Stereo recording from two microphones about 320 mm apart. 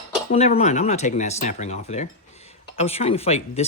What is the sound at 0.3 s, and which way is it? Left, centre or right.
Speech, centre.